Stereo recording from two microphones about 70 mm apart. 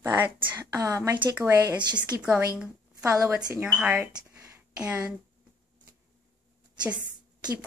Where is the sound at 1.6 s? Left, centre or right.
Right.